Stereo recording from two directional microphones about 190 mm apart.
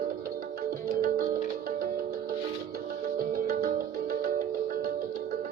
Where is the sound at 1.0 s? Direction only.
50° right (ahead or behind).